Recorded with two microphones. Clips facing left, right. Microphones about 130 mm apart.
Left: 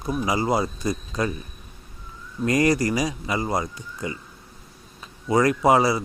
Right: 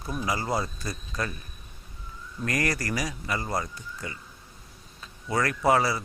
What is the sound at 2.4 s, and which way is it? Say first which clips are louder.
A man's voice: left 9 dB; 20° left (ahead or behind).